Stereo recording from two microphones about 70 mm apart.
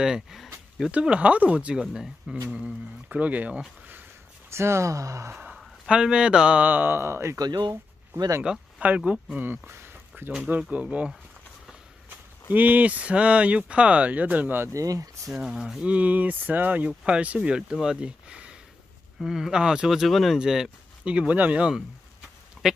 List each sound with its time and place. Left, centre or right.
0.0 s speech: centre
0.9 s speech: centre
4.5 s speech: right
5.9 s speech: centre; by 7.3 s right
7.3 s speech: right
8.5 s speech: centre
9.4 s a sound: right
10.7 s speech: centre
12.4 s speech: right
14.7 s speech: right
15.4 s speech: centre
15.8 s speech: right